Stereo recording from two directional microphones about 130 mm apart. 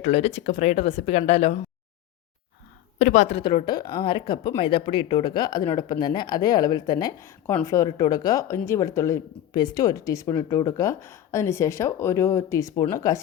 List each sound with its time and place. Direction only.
0.0 s speech: 55° left (ahead or behind)
3.0 s a woman's voice: 70° left (ahead or behind)
3.3 s speech: 40° left (ahead or behind); by 13.1 s 25° left (ahead or behind)